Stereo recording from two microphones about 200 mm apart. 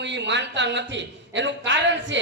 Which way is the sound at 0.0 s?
60° right (ahead or behind).